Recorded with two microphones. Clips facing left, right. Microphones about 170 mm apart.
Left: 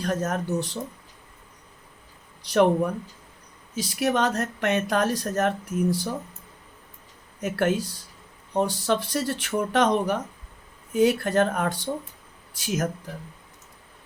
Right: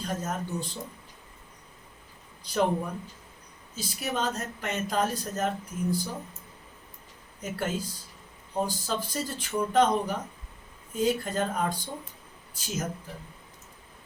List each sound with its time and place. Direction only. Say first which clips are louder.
0.0 s speech: left 6 dB; 75° left (ahead or behind)
2.4 s speech: left 7 dB; 75° left (ahead or behind)
7.4 s speech: left 8 dB; 75° left (ahead or behind)